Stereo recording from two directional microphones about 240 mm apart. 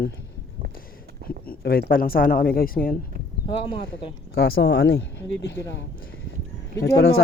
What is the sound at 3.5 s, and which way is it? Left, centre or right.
Speech, left.